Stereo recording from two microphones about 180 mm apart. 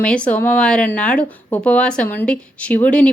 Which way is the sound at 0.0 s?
5° left (ahead or behind).